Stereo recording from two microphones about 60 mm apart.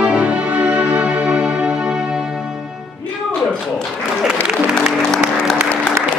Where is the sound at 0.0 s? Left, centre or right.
Right.